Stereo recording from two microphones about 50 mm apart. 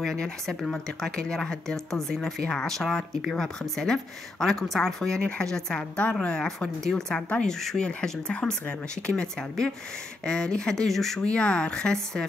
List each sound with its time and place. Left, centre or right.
0.0 s speech: centre
11.2 s speech: left